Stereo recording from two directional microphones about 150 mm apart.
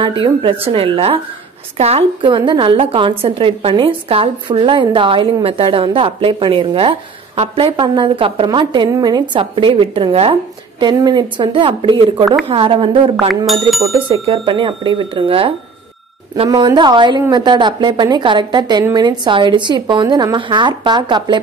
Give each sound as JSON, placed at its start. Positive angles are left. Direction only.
{"t": 0.2, "sound": "a woman's voice", "side_deg": -35}
{"t": 13.5, "sound": "speech", "side_deg": 0}
{"t": 13.9, "sound": "a woman's voice", "side_deg": -40}